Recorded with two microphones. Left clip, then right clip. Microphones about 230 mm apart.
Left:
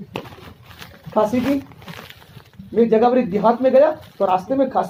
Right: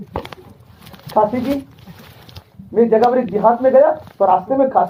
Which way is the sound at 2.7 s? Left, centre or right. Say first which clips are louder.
Right 2 dB; left.